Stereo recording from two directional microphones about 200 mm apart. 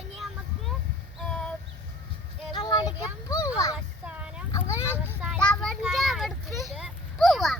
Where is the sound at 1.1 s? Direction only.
Centre (ahead or behind).